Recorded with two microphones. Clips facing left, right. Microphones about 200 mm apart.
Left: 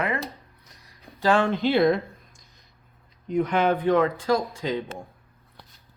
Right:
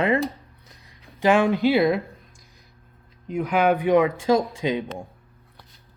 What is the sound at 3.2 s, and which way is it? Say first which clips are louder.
Speech: right 1 dB; 5° right (ahead or behind).